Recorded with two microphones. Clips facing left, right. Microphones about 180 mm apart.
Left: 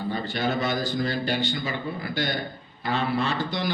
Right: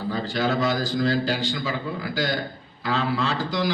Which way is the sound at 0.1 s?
90° right.